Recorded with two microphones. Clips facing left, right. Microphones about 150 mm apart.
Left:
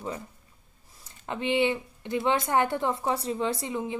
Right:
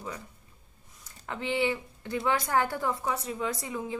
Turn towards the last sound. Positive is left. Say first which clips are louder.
# left 3 dB
turn(degrees=20)  # may be behind; listen again after turning